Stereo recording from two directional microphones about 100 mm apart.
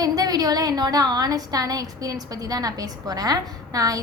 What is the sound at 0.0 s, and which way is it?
A woman's voice, 40° right (ahead or behind).